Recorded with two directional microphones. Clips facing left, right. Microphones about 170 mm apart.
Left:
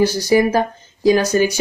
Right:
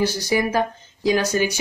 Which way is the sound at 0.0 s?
40° left (ahead or behind).